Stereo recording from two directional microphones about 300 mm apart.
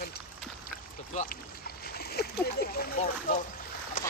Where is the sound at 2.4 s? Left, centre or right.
Left.